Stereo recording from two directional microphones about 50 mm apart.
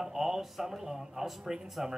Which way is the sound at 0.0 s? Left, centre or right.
Centre.